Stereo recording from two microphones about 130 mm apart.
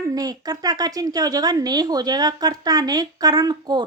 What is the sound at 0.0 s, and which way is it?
Speech, 30° right (ahead or behind).